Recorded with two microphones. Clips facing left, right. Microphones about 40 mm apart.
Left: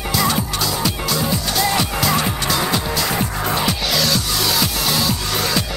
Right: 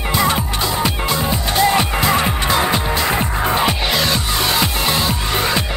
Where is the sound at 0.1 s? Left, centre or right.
Right.